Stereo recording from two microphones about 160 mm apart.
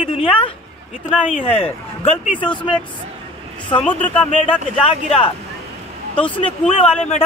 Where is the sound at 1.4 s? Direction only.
35° left (ahead or behind).